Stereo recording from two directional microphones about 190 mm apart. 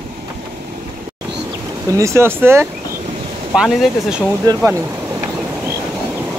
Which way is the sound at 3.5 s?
Centre (ahead or behind).